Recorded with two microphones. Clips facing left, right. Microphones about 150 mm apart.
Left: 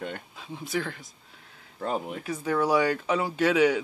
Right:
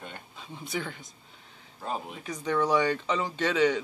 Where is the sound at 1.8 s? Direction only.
60° left (ahead or behind).